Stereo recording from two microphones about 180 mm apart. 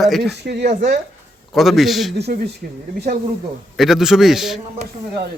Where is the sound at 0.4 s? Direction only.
65° right (ahead or behind).